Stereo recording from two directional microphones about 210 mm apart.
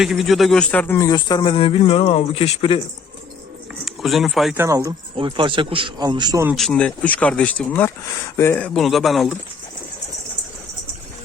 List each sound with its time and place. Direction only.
0.0 s speech: centre (ahead or behind); by 2.8 s 25° left (ahead or behind)
3.8 s speech: centre (ahead or behind)
4.5 s a man's voice: 15° right (ahead or behind)
6.6 s speech: 5° left (ahead or behind)